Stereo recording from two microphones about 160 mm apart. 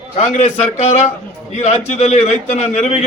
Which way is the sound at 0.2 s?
45° left (ahead or behind).